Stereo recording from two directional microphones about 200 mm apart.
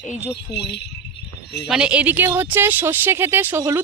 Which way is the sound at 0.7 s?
55° left (ahead or behind).